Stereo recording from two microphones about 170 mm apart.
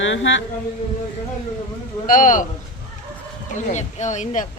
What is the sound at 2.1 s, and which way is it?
Speech, 50° left (ahead or behind).